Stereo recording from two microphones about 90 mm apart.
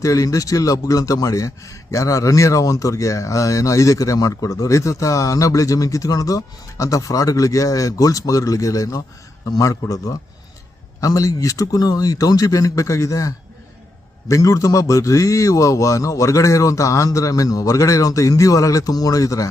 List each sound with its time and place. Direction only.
0.0 s speech: 40° left (ahead or behind)